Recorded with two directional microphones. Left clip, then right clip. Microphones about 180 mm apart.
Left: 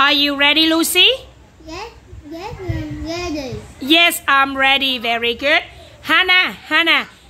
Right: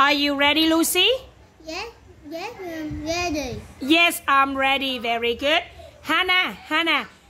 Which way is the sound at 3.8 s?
5° right (ahead or behind).